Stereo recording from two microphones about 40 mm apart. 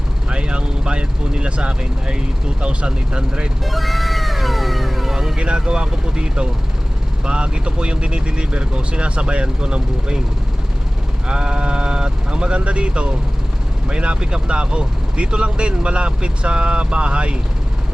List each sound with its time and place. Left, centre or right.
0.3 s speech: right
3.7 s cat: centre
5.4 s speech: right
11.3 s speech: right